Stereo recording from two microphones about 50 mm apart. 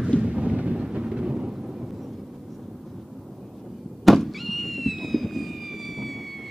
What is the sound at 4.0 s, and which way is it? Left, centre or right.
Fireworks, centre.